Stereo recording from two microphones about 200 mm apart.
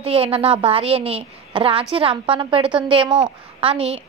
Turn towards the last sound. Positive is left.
turn(degrees=-30)  # may be behind; listen again after turning